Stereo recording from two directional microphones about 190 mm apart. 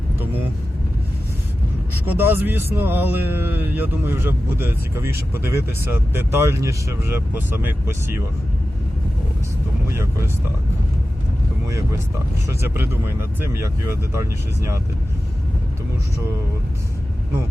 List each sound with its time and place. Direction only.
2.1 s speech: 10° right (ahead or behind)
9.9 s speech: 15° right (ahead or behind)
12.5 s speech: 10° right (ahead or behind)